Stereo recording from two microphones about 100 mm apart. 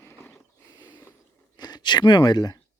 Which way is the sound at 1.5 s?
45° left (ahead or behind).